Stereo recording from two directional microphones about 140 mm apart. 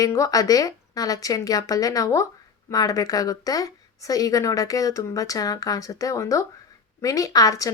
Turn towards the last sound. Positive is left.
turn(degrees=25)  # may be behind; listen again after turning